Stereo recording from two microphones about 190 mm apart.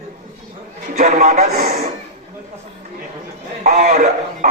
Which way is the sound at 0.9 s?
45° right (ahead or behind).